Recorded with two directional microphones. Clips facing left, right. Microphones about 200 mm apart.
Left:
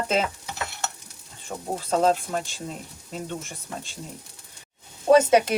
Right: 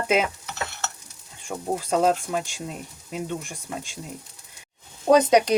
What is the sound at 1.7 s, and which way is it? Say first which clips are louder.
Speech: even; 10° right (ahead or behind).